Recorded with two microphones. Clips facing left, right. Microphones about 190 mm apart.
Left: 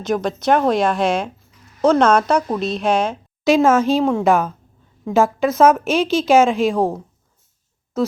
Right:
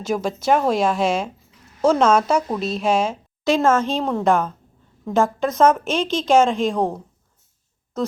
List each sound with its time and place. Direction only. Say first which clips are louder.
0.0 s a woman's voice: left 2 dB; 5° right (ahead or behind)
3.4 s a woman's voice: left 4 dB; 10° left (ahead or behind)